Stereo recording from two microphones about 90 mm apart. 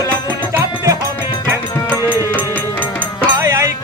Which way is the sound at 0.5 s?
35° right (ahead or behind).